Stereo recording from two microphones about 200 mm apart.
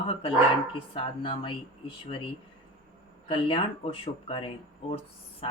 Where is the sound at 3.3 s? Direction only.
25° left (ahead or behind).